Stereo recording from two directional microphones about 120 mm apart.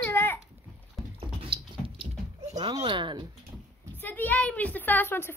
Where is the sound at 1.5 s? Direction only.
45° right (ahead or behind).